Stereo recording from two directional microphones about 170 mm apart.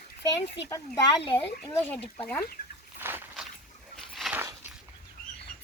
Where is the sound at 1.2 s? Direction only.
30° left (ahead or behind).